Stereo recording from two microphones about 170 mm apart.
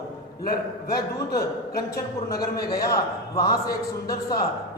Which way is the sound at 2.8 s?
20° left (ahead or behind).